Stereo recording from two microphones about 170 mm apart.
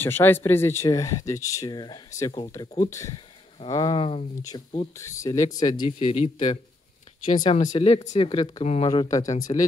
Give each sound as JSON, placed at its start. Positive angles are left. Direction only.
{"t": 0.0, "sound": "speech", "side_deg": 10}
{"t": 5.0, "sound": "speech", "side_deg": 20}
{"t": 5.9, "sound": "speech", "side_deg": 40}
{"t": 8.9, "sound": "speech", "side_deg": 25}